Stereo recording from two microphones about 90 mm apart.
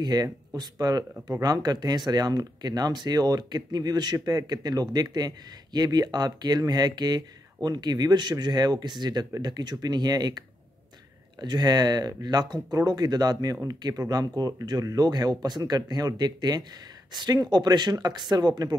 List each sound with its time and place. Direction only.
0.0 s speech: 50° right (ahead or behind)